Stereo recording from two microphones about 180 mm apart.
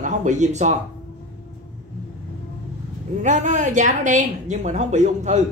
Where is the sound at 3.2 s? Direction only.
45° right (ahead or behind).